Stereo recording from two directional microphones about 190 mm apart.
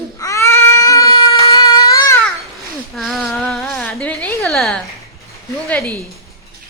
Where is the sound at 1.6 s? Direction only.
20° left (ahead or behind).